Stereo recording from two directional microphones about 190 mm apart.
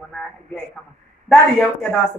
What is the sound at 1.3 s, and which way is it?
Speech, 5° left (ahead or behind).